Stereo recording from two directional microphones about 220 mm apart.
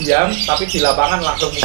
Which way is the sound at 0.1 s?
15° right (ahead or behind).